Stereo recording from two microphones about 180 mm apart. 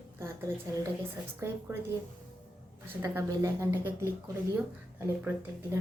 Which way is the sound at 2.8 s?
10° right (ahead or behind).